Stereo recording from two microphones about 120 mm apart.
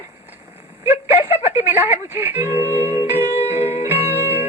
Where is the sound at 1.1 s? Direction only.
60° left (ahead or behind).